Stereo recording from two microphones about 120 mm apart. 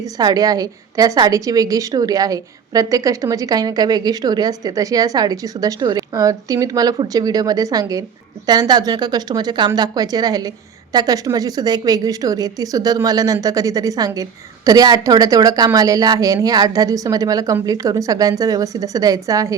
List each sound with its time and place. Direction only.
0.2 s speech: 30° right (ahead or behind)